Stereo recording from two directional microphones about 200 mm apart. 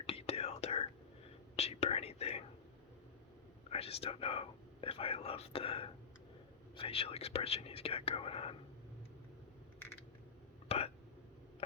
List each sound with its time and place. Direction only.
0.0 s whispering: 30° left (ahead or behind)
3.7 s speech: 30° left (ahead or behind)
10.7 s a sound: 30° left (ahead or behind)